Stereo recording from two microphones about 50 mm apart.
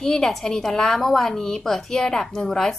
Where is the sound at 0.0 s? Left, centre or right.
Centre.